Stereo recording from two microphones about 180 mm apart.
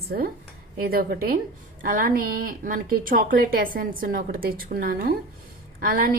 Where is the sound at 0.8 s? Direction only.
55° right (ahead or behind).